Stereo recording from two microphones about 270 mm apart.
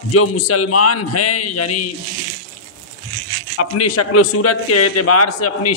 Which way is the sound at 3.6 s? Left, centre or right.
Left.